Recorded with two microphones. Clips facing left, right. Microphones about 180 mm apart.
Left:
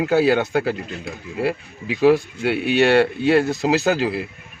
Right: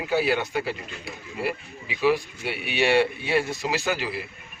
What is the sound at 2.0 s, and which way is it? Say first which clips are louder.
Speech: left 7 dB; 70° left (ahead or behind).